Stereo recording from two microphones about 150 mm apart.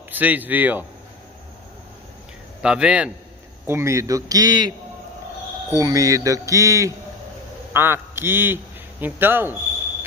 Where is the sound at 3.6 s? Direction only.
20° right (ahead or behind).